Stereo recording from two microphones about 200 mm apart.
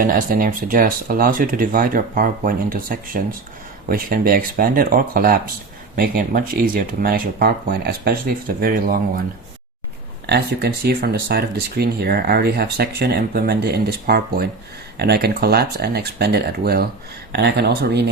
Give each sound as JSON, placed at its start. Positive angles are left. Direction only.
{"t": 0.0, "sound": "speech", "side_deg": -45}
{"t": 10.2, "sound": "speech", "side_deg": -55}